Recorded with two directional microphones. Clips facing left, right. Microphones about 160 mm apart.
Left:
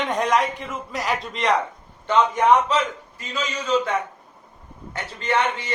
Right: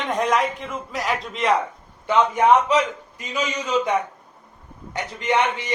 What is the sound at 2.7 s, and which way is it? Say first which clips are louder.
A man's voice: right 3 dB; 15° right (ahead or behind).